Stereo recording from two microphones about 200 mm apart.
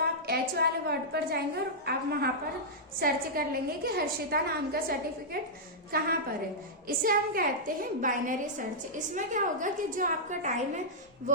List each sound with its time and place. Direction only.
0.0 s a woman's voice: 50° right (ahead or behind)